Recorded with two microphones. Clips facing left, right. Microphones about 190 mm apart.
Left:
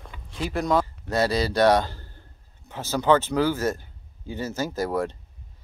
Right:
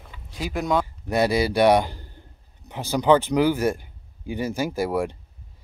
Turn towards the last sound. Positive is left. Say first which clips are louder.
# right 2 dB
turn(degrees=-10)  # may be behind; listen again after turning